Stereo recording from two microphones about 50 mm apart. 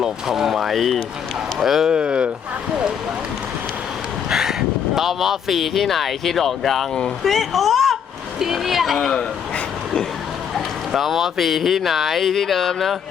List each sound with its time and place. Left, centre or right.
0.0 s speech: centre
4.3 s a sound: centre
4.9 s speech: centre
9.0 s speech: centre
10.9 s speech: centre